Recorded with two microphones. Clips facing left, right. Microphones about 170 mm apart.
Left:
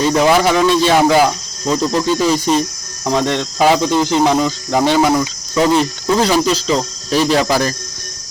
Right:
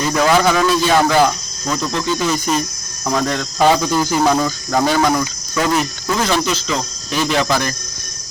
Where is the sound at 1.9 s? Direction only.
35° left (ahead or behind); by 5.3 s 15° left (ahead or behind).